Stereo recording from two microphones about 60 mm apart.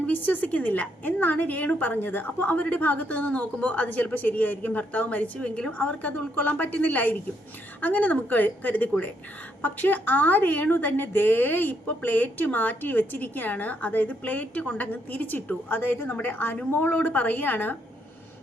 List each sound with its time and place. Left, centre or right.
0.0 s a woman's voice: left